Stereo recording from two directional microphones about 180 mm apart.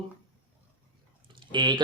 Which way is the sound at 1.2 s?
25° right (ahead or behind).